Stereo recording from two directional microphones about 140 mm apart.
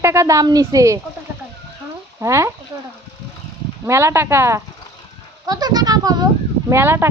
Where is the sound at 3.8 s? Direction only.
20° right (ahead or behind).